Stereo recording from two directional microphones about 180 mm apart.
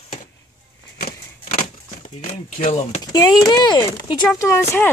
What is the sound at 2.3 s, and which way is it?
Speech, 45° left (ahead or behind).